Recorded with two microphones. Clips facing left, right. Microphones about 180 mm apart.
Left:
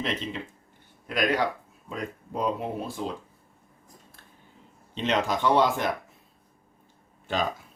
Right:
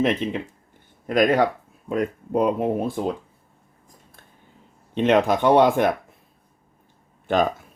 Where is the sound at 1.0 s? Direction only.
45° right (ahead or behind).